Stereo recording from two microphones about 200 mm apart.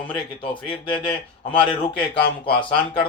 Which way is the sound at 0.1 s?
25° left (ahead or behind).